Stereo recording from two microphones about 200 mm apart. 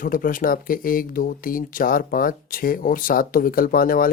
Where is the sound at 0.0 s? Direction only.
45° left (ahead or behind).